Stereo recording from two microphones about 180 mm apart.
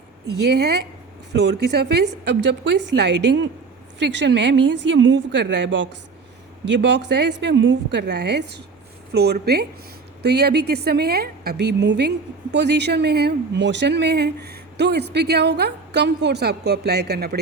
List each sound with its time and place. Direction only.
0.4 s a woman's voice: 65° right (ahead or behind)